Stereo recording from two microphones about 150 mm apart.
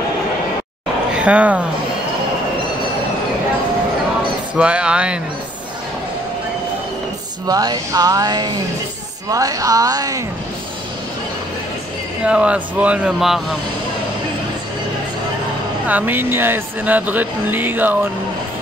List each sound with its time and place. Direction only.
1.1 s speech: 10° right (ahead or behind)
4.6 s speech: 5° right (ahead or behind)
7.4 s music: 25° right (ahead or behind)
12.3 s speech: 10° right (ahead or behind)
15.9 s speech: 10° right (ahead or behind)